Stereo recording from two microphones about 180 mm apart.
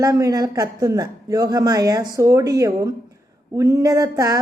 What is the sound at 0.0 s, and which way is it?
Speech, 20° right (ahead or behind).